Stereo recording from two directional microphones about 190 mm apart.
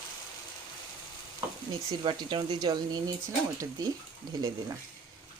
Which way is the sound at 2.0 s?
25° right (ahead or behind).